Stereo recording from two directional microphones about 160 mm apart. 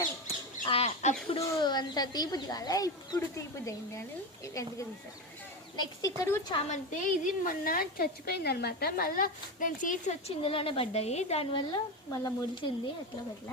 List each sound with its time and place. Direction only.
0.6 s chicken: 35° left (ahead or behind)
1.4 s speech: 25° left (ahead or behind)
5.7 s speech: 25° left (ahead or behind)
6.7 s a woman's voice: 50° left (ahead or behind)
10.2 s a woman's voice: 35° left (ahead or behind)